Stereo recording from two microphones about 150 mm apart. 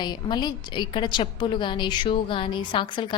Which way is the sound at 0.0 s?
30° left (ahead or behind).